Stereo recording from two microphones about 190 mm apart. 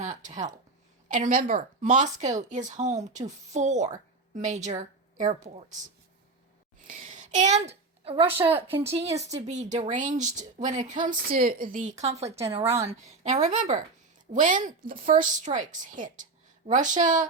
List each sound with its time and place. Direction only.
0.0 s a woman's voice: 40° right (ahead or behind)
6.8 s a woman's voice: 40° right (ahead or behind)